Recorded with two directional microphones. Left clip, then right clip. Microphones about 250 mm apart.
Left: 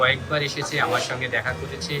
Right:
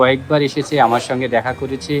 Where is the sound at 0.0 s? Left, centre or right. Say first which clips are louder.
Right 7 dB; centre.